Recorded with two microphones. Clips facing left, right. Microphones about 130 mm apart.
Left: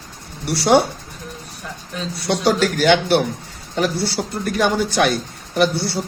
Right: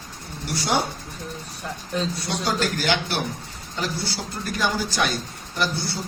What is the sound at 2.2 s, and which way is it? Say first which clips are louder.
Speech: left 7 dB; 75° left (ahead or behind).